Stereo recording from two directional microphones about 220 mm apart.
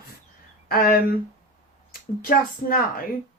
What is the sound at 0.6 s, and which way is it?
Speech, 40° left (ahead or behind).